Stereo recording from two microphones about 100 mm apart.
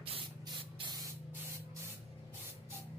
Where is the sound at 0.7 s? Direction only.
45° right (ahead or behind).